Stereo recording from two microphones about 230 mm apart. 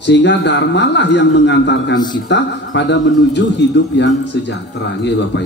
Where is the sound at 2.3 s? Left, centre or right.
Left.